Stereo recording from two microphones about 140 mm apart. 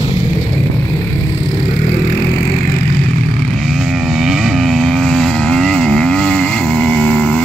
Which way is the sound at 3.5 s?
Centre (ahead or behind).